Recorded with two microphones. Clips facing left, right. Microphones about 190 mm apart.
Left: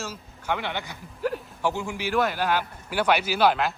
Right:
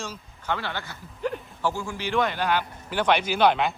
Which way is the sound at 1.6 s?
15° left (ahead or behind).